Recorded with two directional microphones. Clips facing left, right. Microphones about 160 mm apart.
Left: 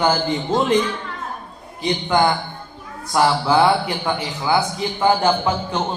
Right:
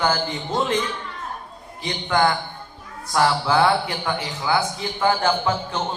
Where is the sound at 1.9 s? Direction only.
20° left (ahead or behind).